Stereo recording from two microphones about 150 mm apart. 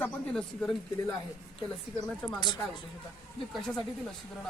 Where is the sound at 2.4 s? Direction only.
30° left (ahead or behind).